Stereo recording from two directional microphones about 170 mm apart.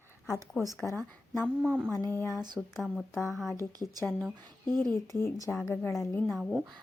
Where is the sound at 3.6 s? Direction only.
20° right (ahead or behind).